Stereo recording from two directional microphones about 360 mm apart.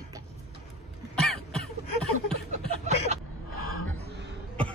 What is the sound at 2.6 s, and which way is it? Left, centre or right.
Chuckle, centre.